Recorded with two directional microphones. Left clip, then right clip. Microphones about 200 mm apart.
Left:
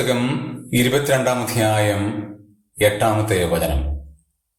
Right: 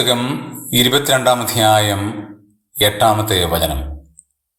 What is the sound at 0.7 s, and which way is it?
Speech, 25° right (ahead or behind).